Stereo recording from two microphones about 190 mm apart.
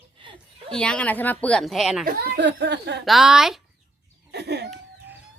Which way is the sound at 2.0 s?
60° right (ahead or behind).